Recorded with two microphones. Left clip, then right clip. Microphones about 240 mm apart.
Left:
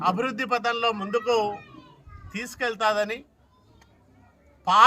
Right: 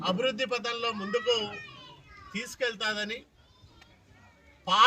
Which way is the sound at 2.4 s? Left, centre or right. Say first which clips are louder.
Left 4 dB; left.